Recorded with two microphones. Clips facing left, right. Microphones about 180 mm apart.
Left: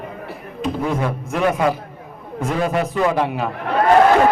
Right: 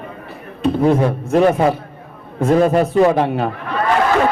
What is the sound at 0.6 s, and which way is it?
Speech, 30° right (ahead or behind).